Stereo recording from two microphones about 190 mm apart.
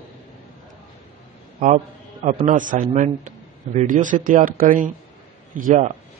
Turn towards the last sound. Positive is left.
turn(degrees=-40)  # may be behind; listen again after turning